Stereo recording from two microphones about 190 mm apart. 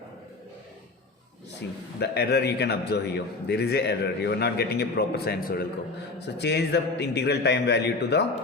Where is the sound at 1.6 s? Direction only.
65° left (ahead or behind).